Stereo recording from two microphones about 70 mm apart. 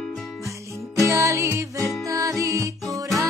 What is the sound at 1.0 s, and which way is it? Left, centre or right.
Music, right.